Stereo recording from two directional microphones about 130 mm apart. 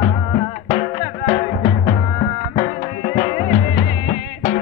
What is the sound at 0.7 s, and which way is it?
Music, 60° left (ahead or behind).